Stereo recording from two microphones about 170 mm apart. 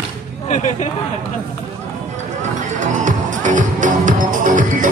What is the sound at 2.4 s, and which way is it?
Music, 45° right (ahead or behind).